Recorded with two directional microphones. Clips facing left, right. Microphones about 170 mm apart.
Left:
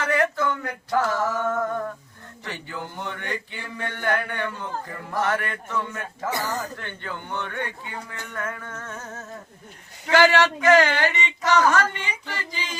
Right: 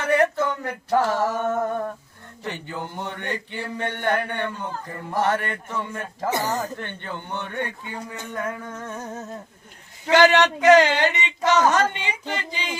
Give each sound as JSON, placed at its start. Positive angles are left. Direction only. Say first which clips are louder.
{"t": 0.1, "sound": "a sound", "louder": "right 4 dB", "side_deg": -25}
{"t": 2.4, "sound": "a man's voice", "louder": "right 3 dB", "side_deg": -20}
{"t": 8.1, "sound": "music", "louder": "right 4 dB", "side_deg": -20}
{"t": 10.1, "sound": "a man's voice", "louder": "right 2 dB", "side_deg": -20}